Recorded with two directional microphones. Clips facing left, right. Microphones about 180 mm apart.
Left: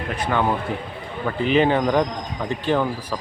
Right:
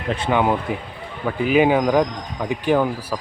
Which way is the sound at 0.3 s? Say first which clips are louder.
Right 3 dB; 15° right (ahead or behind).